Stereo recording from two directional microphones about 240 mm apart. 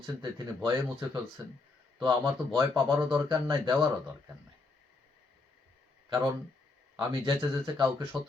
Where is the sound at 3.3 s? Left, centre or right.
Centre.